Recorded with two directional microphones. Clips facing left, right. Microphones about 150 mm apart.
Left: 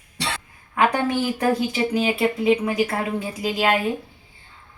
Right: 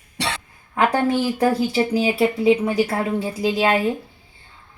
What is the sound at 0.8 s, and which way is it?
Speech, 35° right (ahead or behind).